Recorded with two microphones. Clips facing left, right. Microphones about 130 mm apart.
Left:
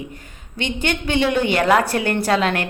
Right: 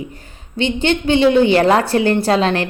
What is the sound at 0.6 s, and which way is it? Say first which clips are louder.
A woman's voice: right 6 dB; 30° right (ahead or behind).